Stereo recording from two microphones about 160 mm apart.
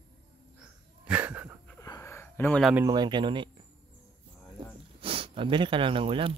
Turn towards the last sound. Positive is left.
turn(degrees=-35)  # may be behind; listen again after turning